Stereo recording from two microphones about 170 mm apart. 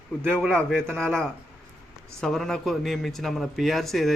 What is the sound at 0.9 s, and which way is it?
Speech, 5° left (ahead or behind).